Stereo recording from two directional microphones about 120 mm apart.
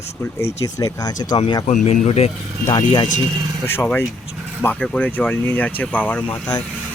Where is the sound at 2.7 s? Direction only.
40° left (ahead or behind).